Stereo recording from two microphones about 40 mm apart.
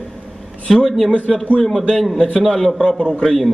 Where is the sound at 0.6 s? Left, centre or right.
Centre.